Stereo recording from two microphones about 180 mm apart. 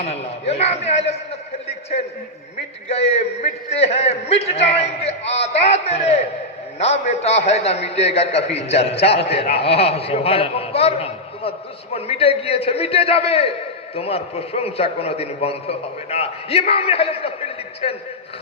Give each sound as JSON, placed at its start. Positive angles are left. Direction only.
{"t": 0.0, "sound": "a man's voice", "side_deg": 35}
{"t": 1.6, "sound": "a sound", "side_deg": 35}
{"t": 2.9, "sound": "a man's voice", "side_deg": 35}